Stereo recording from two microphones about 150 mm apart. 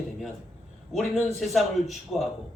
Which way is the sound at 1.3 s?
Centre (ahead or behind).